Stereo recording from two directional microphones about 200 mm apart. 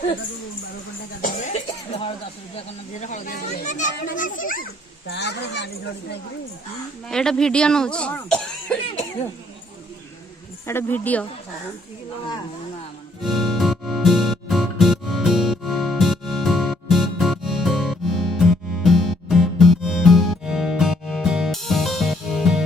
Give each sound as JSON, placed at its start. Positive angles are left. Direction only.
{"t": 1.2, "sound": "cough", "side_deg": 40}
{"t": 3.0, "sound": "a child's voice", "side_deg": 40}
{"t": 5.1, "sound": "speech", "side_deg": 60}
{"t": 7.1, "sound": "speech", "side_deg": 5}
{"t": 10.7, "sound": "speech", "side_deg": 10}
{"t": 13.2, "sound": "music", "side_deg": 0}